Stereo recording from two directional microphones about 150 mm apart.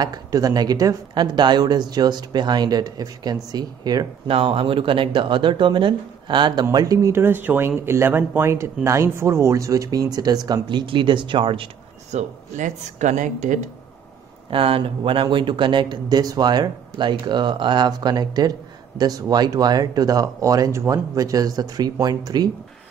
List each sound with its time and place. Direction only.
0.0 s speech: 25° right (ahead or behind)
4.3 s speech: 40° right (ahead or behind)
12.1 s speech: 50° right (ahead or behind)
14.5 s speech: 35° right (ahead or behind)